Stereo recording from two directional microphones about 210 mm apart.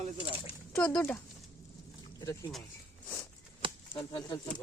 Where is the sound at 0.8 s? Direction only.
10° left (ahead or behind).